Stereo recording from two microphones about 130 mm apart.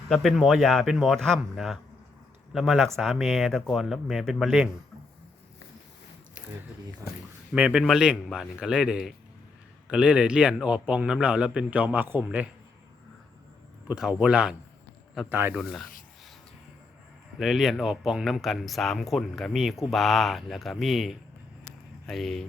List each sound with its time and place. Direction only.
0.1 s speech: centre (ahead or behind)
7.5 s a man's voice: 10° right (ahead or behind)
13.8 s a man's voice: 5° right (ahead or behind)
15.5 s speech: centre (ahead or behind)
17.4 s speech: centre (ahead or behind)